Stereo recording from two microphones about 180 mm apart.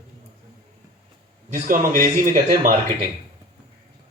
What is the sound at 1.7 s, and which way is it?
Speech, 45° right (ahead or behind).